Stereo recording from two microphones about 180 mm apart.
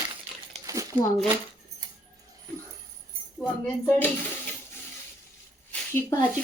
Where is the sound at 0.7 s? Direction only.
20° right (ahead or behind).